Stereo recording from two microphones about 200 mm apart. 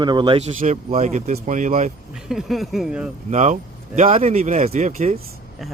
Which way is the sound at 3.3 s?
35° right (ahead or behind).